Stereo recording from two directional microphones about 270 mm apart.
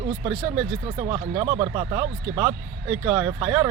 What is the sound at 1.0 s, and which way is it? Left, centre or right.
Speech, centre.